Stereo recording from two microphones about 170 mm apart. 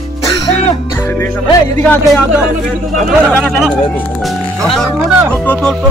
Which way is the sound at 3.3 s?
5° left (ahead or behind).